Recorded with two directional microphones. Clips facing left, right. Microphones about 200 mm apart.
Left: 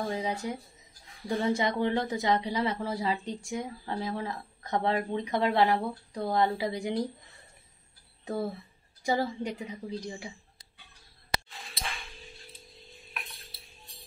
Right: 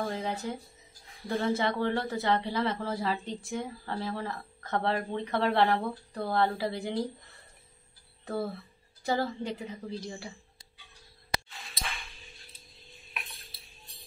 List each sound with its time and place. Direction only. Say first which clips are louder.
0.1 s speech: left 2 dB; 15° left (ahead or behind)
8.3 s speech: left 1 dB; 15° left (ahead or behind)
11.3 s a sound: left 1 dB; 30° left (ahead or behind)